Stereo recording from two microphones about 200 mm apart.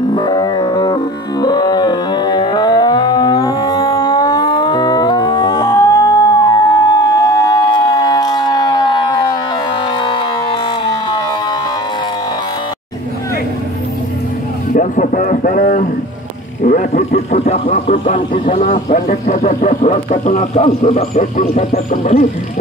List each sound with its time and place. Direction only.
0.1 s music: 20° left (ahead or behind)
10.0 s siren: 25° left (ahead or behind)
14.7 s a sound: 40° left (ahead or behind)